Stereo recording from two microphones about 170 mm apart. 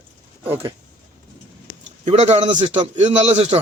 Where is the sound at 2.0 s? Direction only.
40° right (ahead or behind).